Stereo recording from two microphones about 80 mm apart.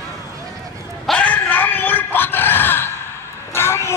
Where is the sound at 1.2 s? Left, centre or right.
Left.